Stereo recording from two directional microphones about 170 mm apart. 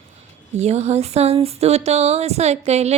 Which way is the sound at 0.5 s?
40° right (ahead or behind).